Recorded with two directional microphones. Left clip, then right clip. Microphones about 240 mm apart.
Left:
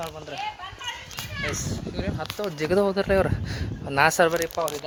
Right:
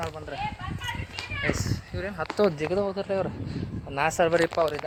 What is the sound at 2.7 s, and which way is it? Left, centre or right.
Speech, left.